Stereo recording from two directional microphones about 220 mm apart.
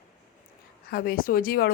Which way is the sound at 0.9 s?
40° left (ahead or behind).